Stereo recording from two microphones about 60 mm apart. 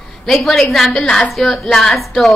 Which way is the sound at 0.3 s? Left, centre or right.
Centre.